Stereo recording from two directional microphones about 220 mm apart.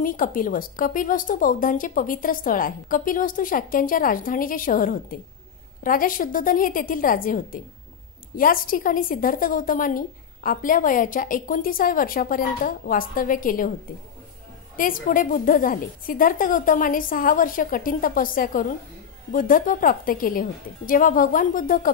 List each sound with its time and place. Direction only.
0.0 s a woman's voice: 40° left (ahead or behind)
14.8 s a woman's voice: 40° left (ahead or behind)